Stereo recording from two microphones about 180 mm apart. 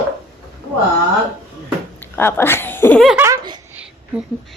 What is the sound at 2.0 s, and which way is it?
Speech, 10° left (ahead or behind).